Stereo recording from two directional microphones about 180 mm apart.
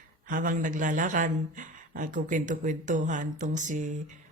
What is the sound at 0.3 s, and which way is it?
A woman's voice, 50° right (ahead or behind).